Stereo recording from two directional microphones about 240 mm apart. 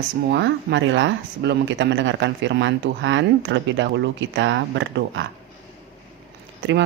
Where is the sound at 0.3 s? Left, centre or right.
Right.